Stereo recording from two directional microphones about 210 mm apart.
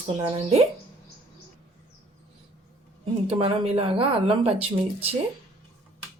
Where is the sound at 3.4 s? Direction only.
25° right (ahead or behind).